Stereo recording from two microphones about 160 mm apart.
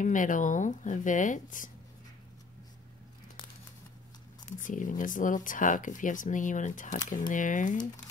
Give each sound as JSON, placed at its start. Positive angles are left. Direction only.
{"t": 0.0, "sound": "speech", "side_deg": 55}
{"t": 4.6, "sound": "speech", "side_deg": 55}